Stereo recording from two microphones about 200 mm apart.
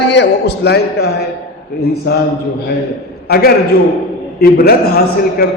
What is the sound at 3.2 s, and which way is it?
A man's voice, 50° left (ahead or behind).